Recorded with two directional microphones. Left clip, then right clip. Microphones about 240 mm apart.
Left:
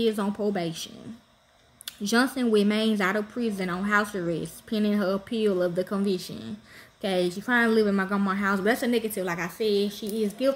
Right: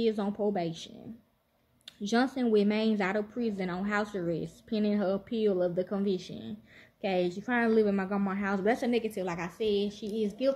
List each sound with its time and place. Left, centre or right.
0.0 s speech: left